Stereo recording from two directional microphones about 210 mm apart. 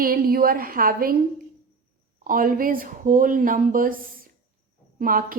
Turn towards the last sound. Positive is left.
turn(degrees=-45)  # may be behind; listen again after turning